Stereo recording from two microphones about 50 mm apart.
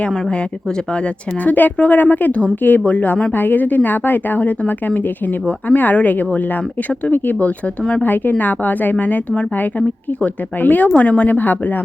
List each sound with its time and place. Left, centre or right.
1.0 s a woman's voice: left
8.0 s a woman's voice: left